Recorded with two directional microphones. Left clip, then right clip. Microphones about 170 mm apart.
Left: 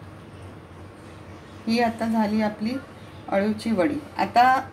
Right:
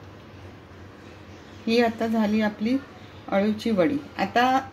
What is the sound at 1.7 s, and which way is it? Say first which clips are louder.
A woman's voice: right 1 dB; 50° right (ahead or behind).